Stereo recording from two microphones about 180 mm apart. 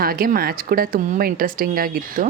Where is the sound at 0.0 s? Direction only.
55° right (ahead or behind).